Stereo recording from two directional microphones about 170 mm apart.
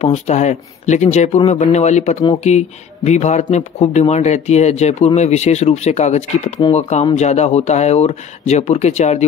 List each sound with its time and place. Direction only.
0.0 s speech: 40° left (ahead or behind)